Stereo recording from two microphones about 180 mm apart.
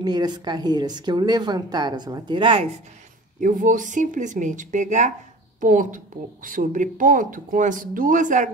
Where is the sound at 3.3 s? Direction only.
50° right (ahead or behind).